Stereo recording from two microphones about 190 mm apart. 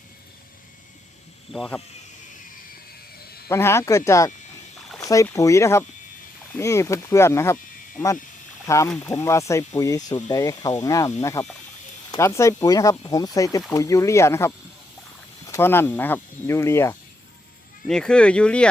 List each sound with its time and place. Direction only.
1.5 s speech: 5° left (ahead or behind)
3.5 s speech: 15° left (ahead or behind)
8.6 s speech: 15° left (ahead or behind)
17.8 s speech: 5° left (ahead or behind)